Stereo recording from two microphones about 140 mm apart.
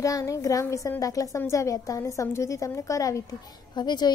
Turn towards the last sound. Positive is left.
turn(degrees=30)  # may be behind; listen again after turning